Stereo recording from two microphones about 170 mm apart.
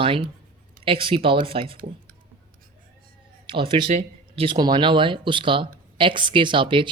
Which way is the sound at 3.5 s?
30° right (ahead or behind).